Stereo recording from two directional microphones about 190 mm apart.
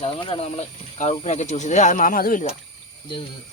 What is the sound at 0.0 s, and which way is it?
Speech, 30° left (ahead or behind).